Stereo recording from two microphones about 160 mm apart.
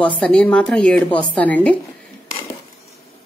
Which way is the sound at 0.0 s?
10° left (ahead or behind).